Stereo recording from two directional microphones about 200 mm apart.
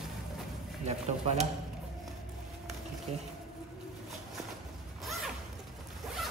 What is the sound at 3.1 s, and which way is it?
Speech, 30° right (ahead or behind).